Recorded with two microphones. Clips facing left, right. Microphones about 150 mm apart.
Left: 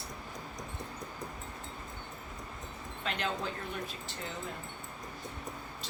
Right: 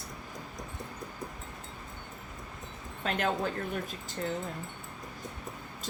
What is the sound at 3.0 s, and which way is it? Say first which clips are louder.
Speech: right 5 dB; 45° right (ahead or behind).